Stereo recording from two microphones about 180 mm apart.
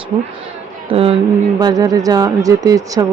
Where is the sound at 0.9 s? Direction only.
30° right (ahead or behind).